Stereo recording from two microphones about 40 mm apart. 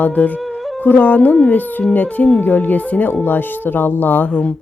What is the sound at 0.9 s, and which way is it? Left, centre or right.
Speech, left.